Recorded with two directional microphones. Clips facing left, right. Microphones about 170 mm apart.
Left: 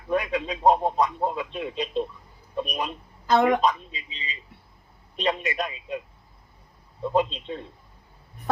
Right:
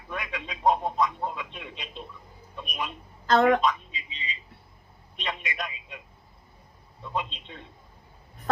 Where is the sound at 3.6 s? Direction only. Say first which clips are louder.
Left 3 dB; 40° left (ahead or behind).